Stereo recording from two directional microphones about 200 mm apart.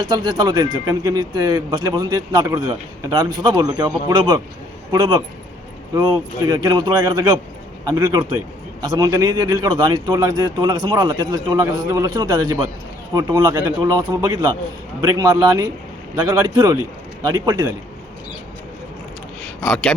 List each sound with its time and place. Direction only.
0.0 s speech: 20° right (ahead or behind)